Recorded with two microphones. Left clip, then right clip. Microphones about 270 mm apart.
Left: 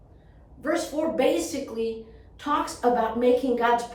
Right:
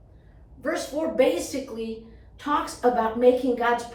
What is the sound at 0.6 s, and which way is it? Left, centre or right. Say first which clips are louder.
A woman's voice: left 1 dB; centre.